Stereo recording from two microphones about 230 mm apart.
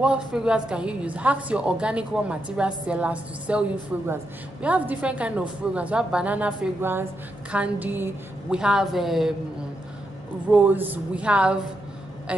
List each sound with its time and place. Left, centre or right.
0.0 s a woman's voice: centre
10.5 s a woman's voice: centre